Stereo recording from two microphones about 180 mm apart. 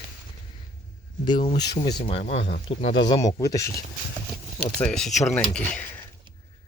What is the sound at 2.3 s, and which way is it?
Speech, 75° left (ahead or behind).